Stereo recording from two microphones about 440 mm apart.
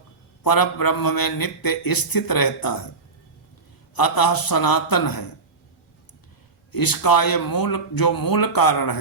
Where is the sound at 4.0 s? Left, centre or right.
Left.